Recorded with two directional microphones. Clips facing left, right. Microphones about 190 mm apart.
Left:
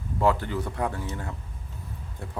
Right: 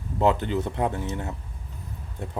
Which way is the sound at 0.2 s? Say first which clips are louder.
Right 2 dB; 20° right (ahead or behind).